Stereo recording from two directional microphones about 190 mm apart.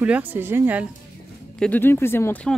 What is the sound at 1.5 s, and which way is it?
Speech, 5° left (ahead or behind).